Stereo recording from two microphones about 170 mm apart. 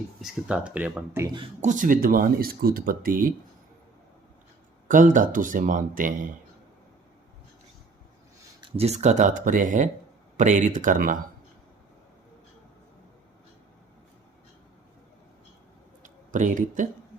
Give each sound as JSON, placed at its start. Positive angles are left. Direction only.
{"t": 0.2, "sound": "speech", "side_deg": -5}
{"t": 1.6, "sound": "speech", "side_deg": -50}
{"t": 4.9, "sound": "speech", "side_deg": -50}
{"t": 8.7, "sound": "speech", "side_deg": -40}
{"t": 16.0, "sound": "a sound", "side_deg": -50}